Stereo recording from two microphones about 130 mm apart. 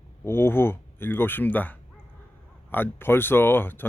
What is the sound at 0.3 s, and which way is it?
Speech, 20° left (ahead or behind).